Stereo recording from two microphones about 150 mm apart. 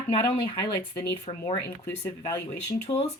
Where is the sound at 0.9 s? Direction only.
25° left (ahead or behind).